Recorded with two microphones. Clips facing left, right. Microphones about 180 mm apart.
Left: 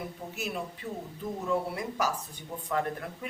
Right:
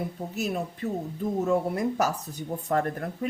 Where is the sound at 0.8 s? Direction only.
45° right (ahead or behind).